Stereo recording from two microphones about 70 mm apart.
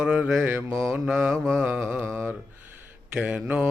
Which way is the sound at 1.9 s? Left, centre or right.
Right.